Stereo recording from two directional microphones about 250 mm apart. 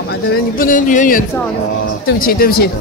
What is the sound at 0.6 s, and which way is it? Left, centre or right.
Speech, left.